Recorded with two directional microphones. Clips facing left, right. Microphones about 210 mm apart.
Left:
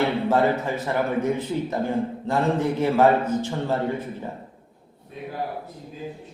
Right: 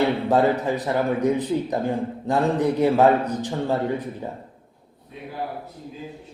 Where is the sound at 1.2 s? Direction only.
15° right (ahead or behind).